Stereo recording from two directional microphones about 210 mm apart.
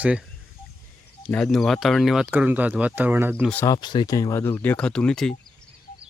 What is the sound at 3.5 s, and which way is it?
Speech, 10° left (ahead or behind).